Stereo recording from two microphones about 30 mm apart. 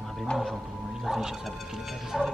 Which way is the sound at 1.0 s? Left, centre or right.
Centre.